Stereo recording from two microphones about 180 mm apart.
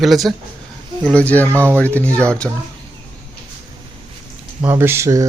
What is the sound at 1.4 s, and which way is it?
Speech, 15° right (ahead or behind).